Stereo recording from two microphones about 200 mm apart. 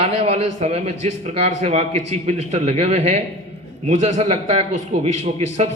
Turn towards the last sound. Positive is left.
turn(degrees=-35)  # may be behind; listen again after turning